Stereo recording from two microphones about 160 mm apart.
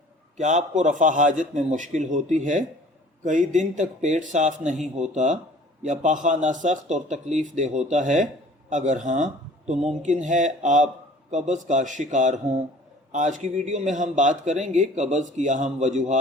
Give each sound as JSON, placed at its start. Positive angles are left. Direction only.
{"t": 0.3, "sound": "a man's voice", "side_deg": -45}